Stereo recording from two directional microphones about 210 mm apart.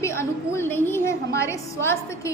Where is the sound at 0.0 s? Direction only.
10° left (ahead or behind).